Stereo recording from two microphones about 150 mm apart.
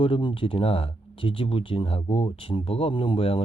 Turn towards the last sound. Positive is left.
turn(degrees=40)  # may be behind; listen again after turning